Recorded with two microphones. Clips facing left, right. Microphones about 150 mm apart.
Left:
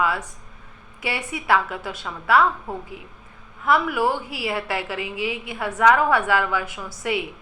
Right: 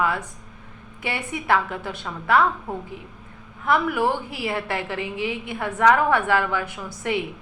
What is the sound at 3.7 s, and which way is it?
Speech, 5° left (ahead or behind).